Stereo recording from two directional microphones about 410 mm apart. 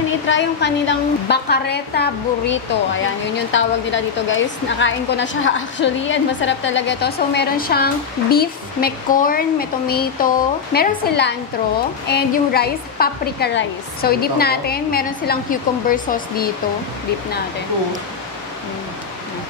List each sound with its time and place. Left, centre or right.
0.3 s a woman's voice: left